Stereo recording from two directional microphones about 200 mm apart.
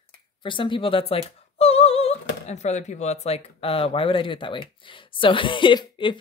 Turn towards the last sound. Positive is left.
turn(degrees=25)  # may be behind; listen again after turning